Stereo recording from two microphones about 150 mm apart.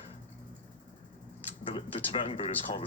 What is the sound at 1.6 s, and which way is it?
Speech, 35° left (ahead or behind).